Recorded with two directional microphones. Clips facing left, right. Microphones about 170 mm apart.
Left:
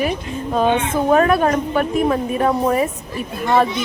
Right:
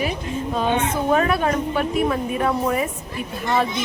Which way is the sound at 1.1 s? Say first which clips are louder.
Left 6 dB; 50° left (ahead or behind).